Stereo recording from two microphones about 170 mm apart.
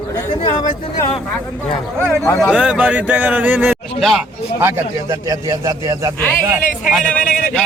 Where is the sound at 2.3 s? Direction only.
5° right (ahead or behind).